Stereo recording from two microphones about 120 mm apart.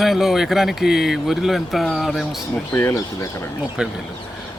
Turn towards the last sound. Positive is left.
turn(degrees=-5)  # may be behind; listen again after turning